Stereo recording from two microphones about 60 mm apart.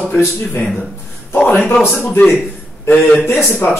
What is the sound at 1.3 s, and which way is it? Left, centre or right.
Speech, left.